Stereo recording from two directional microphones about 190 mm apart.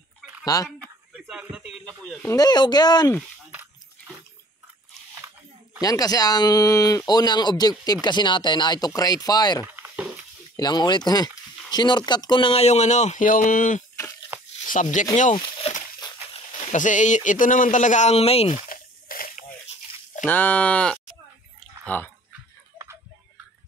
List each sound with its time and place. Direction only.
0.7 s a sound: 5° right (ahead or behind)
2.0 s speech: 5° left (ahead or behind)
2.3 s speech: 20° left (ahead or behind)
5.8 s speech: 20° left (ahead or behind)
9.8 s stir: 5° right (ahead or behind)
10.5 s a man's voice: 20° left (ahead or behind); by 15.0 s 40° left (ahead or behind)
15.3 s speech: 25° left (ahead or behind)
16.5 s a man's voice: 40° left (ahead or behind)
18.7 s a sound: 50° left (ahead or behind)
20.2 s speech: 10° left (ahead or behind)